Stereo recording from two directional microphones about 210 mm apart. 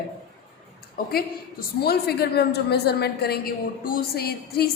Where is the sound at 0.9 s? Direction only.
45° left (ahead or behind).